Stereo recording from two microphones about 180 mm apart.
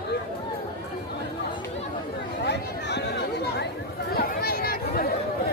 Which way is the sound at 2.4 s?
70° left (ahead or behind).